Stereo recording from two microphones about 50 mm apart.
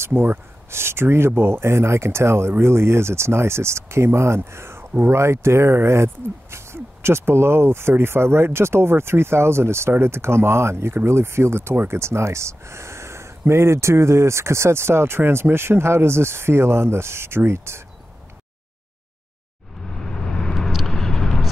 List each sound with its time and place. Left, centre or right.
0.0 s speech: right
12.0 s speech: right
19.9 s vehicle: centre